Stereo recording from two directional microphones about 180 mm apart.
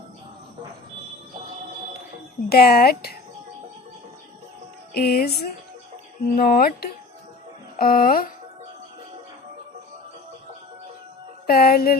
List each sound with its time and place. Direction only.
2.5 s speech: 60° left (ahead or behind)
4.9 s speech: 60° left (ahead or behind)
11.4 s speech: 55° left (ahead or behind)